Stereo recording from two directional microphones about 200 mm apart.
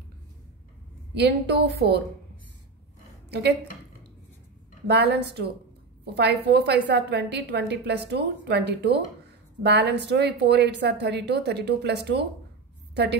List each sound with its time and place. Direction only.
1.8 s a woman's voice: 55° right (ahead or behind)
3.3 s a woman's voice: 55° right (ahead or behind)
4.8 s a woman's voice: 55° right (ahead or behind)